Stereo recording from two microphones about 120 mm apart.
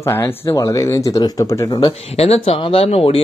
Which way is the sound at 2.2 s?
55° left (ahead or behind).